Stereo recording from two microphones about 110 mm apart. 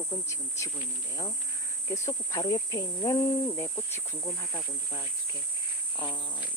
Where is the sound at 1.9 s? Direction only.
30° left (ahead or behind).